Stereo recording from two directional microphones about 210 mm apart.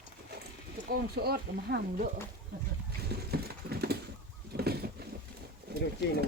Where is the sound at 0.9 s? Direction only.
50° right (ahead or behind).